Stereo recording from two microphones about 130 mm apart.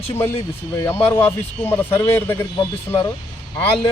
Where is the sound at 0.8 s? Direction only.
20° left (ahead or behind).